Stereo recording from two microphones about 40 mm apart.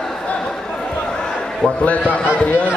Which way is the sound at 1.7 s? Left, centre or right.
Left.